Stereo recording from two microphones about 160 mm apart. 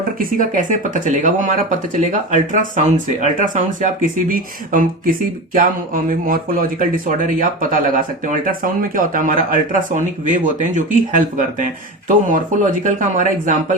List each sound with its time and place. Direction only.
0.2 s speech: 55° right (ahead or behind)